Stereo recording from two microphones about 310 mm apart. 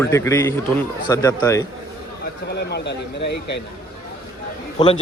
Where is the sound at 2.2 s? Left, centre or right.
Left.